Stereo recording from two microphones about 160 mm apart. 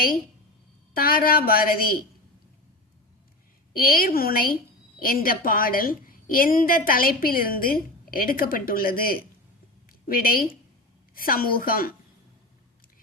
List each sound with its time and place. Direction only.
0.9 s a woman's voice: 65° left (ahead or behind)
3.8 s a woman's voice: 65° left (ahead or behind)